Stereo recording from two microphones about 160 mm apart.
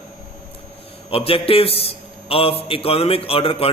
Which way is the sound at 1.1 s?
35° left (ahead or behind).